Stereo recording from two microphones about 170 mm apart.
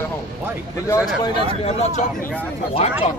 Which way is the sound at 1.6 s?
45° left (ahead or behind).